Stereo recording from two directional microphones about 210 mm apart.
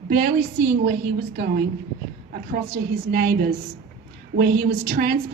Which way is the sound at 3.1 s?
50° right (ahead or behind).